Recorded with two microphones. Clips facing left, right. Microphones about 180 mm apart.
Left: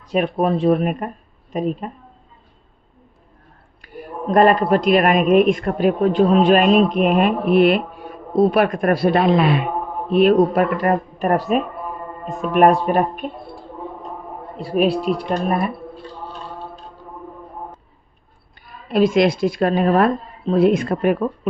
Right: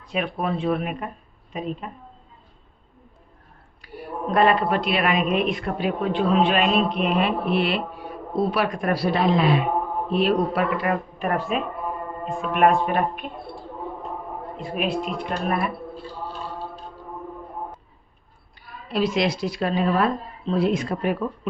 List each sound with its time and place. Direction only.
0.1 s a man's voice: 40° left (ahead or behind)
3.8 s a man's voice: 45° left (ahead or behind)
14.6 s speech: 35° left (ahead or behind)
18.9 s a man's voice: 50° left (ahead or behind)